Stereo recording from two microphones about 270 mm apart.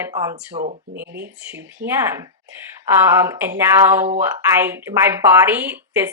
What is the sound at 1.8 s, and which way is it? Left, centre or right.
Speech, right.